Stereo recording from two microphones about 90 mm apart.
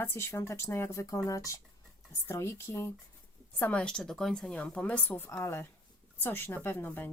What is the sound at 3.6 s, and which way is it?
Speech, 15° left (ahead or behind).